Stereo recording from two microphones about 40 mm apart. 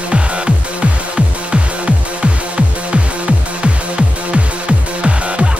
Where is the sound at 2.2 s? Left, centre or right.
Right.